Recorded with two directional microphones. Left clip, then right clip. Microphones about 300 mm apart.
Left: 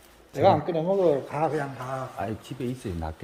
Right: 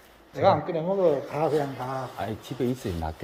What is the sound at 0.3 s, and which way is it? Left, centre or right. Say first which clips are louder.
Speech: left 1 dB; left.